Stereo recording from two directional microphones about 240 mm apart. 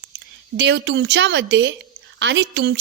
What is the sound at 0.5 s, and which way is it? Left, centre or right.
A woman's voice, right.